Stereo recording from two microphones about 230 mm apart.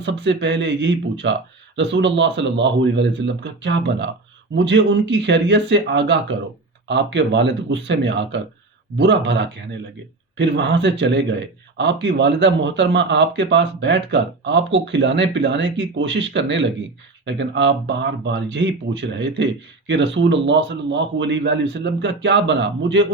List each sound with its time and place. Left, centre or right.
0.0 s a man's voice: right